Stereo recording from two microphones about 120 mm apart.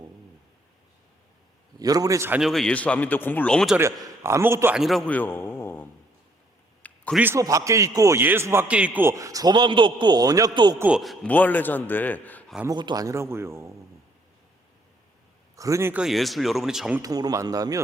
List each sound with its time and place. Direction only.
1.8 s a man's voice: 30° right (ahead or behind)
2.4 s speech: centre (ahead or behind)
3.8 s a man's voice: 20° right (ahead or behind)
4.7 s speech: centre (ahead or behind)
5.0 s a sound: 15° left (ahead or behind)
7.3 s a man's voice: 30° right (ahead or behind)
9.1 s a man's voice: 30° right (ahead or behind)
10.8 s a man's voice: 10° right (ahead or behind)
11.0 s speech: centre (ahead or behind)
11.3 s speech: 15° left (ahead or behind)
12.6 s a man's voice: 35° right (ahead or behind)
15.5 s speech: 25° right (ahead or behind)
15.9 s speech: 5° right (ahead or behind)
17.0 s a man's voice: 30° right (ahead or behind)